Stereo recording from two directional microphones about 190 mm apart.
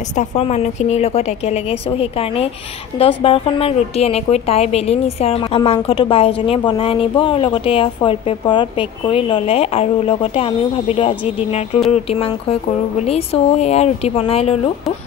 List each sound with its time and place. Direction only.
0.1 s a woman's voice: 35° left (ahead or behind)